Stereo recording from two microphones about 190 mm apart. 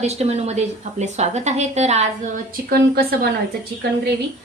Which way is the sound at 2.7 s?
55° right (ahead or behind).